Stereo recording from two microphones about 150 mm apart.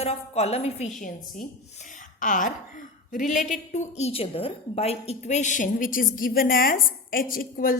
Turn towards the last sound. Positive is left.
turn(degrees=75)  # may be behind; listen again after turning